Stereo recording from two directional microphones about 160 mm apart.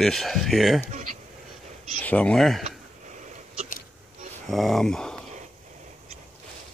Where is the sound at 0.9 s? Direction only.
50° right (ahead or behind).